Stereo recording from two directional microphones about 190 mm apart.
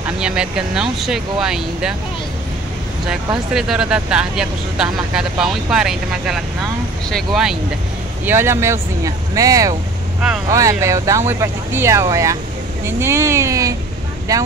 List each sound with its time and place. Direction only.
0.0 s speech: 5° right (ahead or behind)
3.5 s speech: 5° right (ahead or behind)
8.3 s speech: 10° right (ahead or behind)